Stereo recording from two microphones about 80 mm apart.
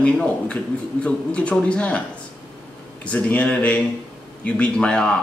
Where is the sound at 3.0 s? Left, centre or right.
Centre.